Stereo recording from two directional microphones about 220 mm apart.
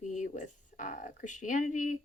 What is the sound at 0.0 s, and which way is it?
Speech, 35° left (ahead or behind).